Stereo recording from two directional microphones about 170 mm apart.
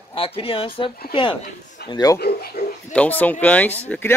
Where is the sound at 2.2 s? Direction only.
70° left (ahead or behind).